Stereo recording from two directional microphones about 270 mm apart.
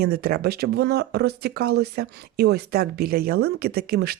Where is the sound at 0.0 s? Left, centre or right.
Right.